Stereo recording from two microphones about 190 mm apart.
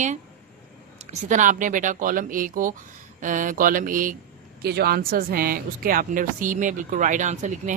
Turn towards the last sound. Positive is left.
turn(degrees=-40)  # may be behind; listen again after turning